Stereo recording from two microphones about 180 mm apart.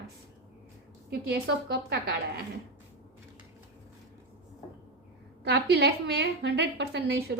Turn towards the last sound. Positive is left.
turn(degrees=-65)  # may be behind; listen again after turning